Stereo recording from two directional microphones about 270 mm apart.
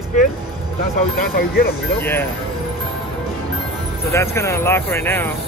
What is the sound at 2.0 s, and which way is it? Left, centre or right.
Speech, centre.